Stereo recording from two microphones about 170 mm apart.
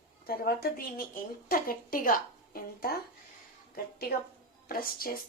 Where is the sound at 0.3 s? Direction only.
60° left (ahead or behind).